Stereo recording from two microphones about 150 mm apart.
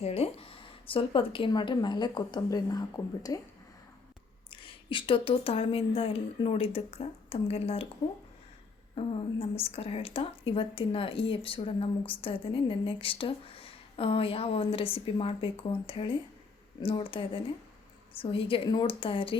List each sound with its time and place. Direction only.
0.0 s a woman's voice: 45° left (ahead or behind); by 3.4 s 25° left (ahead or behind)
4.5 s a woman's voice: 35° left (ahead or behind)
9.0 s a woman's voice: 35° left (ahead or behind)